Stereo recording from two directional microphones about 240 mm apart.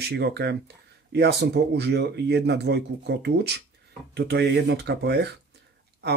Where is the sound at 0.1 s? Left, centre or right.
Right.